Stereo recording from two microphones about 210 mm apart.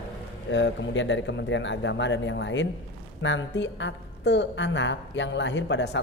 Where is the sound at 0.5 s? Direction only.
60° left (ahead or behind).